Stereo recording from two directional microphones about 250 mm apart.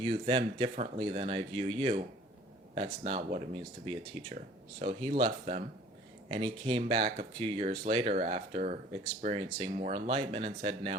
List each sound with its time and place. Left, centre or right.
0.0 s speech: right